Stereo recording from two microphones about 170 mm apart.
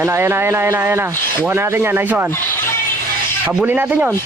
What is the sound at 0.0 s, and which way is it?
Speech, 15° right (ahead or behind).